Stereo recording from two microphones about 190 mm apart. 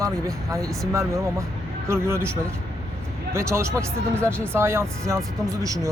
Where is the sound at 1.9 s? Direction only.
15° right (ahead or behind).